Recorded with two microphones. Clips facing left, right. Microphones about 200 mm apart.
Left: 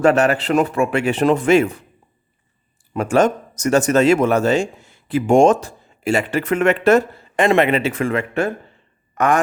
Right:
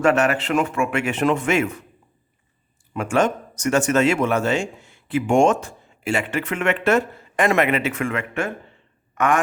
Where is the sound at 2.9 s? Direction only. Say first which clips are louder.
Left 4 dB; 40° left (ahead or behind).